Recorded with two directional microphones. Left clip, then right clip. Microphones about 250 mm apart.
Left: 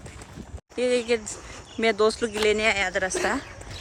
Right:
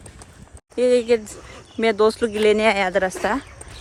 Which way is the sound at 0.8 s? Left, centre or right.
Centre.